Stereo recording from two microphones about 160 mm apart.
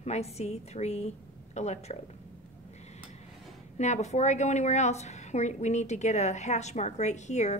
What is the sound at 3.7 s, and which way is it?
A woman's voice, 45° left (ahead or behind).